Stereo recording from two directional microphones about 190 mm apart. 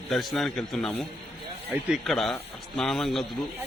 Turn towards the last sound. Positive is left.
turn(degrees=0)  # may be behind; listen again after turning